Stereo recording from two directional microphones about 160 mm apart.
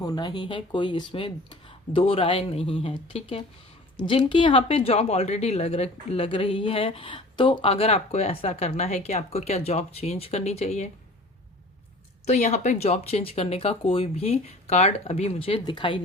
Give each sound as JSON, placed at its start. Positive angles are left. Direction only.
{"t": 0.0, "sound": "speech", "side_deg": 25}
{"t": 12.2, "sound": "speech", "side_deg": 45}